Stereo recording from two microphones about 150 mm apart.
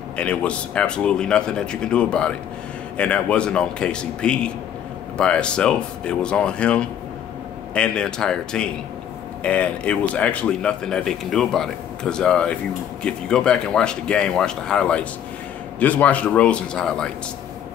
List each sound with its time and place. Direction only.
0.2 s a man's voice: 10° left (ahead or behind)